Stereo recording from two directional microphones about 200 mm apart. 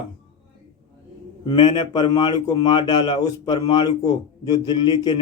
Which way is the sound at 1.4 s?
25° left (ahead or behind).